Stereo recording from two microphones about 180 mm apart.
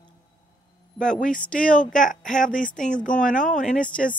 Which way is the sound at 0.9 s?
45° left (ahead or behind).